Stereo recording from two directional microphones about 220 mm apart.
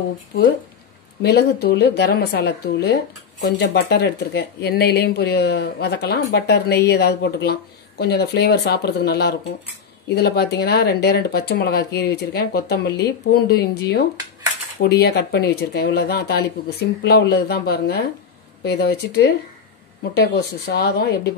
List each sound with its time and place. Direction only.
1.2 s a woman's voice: 50° left (ahead or behind)